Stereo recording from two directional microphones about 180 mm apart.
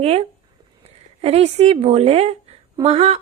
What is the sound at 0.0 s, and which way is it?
A woman's voice, 35° right (ahead or behind).